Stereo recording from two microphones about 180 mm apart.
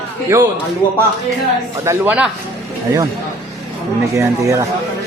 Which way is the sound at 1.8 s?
10° right (ahead or behind).